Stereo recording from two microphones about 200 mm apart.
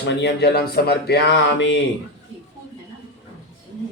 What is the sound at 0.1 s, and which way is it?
Speech, 55° left (ahead or behind).